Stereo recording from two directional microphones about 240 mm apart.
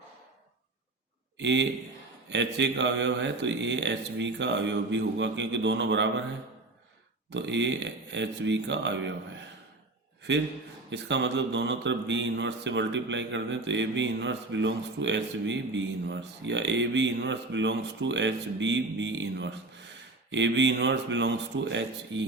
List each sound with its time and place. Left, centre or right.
1.4 s a man's voice: right
7.3 s speech: right
10.9 s speech: right